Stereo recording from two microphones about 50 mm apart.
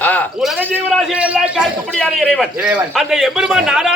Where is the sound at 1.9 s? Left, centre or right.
Left.